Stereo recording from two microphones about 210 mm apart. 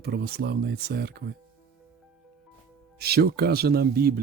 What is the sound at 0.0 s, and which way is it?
Speech, 50° right (ahead or behind).